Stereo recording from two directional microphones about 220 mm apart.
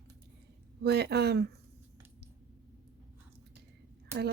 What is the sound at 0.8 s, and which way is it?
Speech, 50° right (ahead or behind).